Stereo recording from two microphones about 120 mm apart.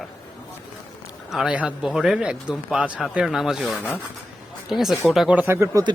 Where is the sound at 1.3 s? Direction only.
5° right (ahead or behind).